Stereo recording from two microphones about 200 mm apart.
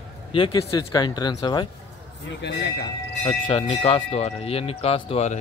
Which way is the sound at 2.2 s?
60° left (ahead or behind).